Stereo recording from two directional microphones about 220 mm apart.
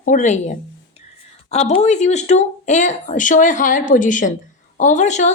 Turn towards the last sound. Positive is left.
turn(degrees=35)  # may be behind; listen again after turning